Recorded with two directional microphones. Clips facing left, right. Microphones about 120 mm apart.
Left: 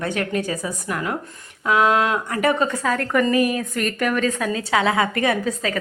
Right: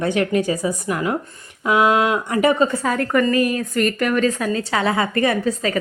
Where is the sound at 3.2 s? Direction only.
10° left (ahead or behind).